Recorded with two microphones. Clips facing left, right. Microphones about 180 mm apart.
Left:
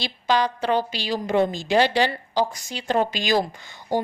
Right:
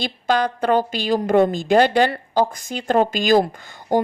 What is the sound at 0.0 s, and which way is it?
A woman's voice, 50° right (ahead or behind).